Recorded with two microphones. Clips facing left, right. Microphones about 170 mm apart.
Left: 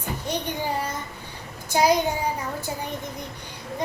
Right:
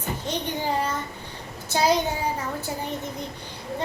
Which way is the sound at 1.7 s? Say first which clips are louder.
Left 2 dB; 15° left (ahead or behind).